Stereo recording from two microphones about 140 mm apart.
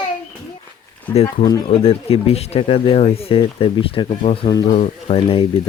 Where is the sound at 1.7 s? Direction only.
45° left (ahead or behind).